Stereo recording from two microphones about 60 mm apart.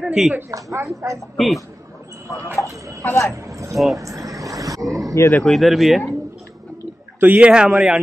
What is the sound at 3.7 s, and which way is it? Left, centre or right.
Speech, centre.